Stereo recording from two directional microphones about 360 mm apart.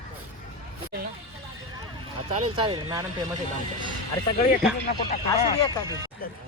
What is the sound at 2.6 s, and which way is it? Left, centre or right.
Speech, centre.